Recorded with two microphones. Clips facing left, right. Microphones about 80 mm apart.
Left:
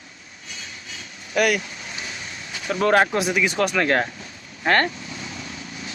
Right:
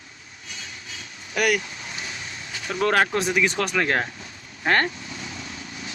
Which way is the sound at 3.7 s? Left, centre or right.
Centre.